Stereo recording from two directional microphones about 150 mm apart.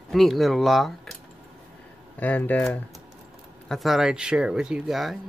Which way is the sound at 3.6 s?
Centre (ahead or behind).